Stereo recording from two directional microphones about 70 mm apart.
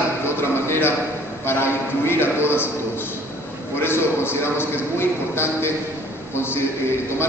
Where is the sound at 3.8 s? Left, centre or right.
Left.